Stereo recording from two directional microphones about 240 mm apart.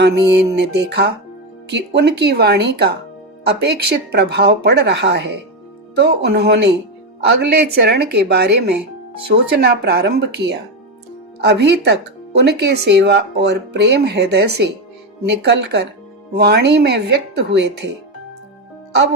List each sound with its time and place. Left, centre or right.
0.0 s speech: right